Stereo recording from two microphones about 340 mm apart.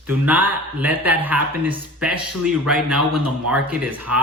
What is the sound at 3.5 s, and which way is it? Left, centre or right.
Speech, centre.